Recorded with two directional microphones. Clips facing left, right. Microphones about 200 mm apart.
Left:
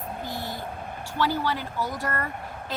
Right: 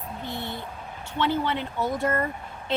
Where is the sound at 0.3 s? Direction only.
65° right (ahead or behind).